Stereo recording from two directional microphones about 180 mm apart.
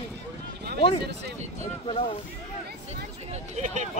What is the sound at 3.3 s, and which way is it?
Speech, 40° right (ahead or behind).